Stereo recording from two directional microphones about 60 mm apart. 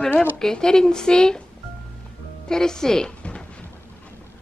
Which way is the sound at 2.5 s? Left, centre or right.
Centre.